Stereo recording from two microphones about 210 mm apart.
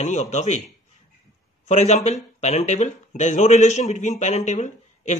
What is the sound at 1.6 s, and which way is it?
Speech, 30° left (ahead or behind).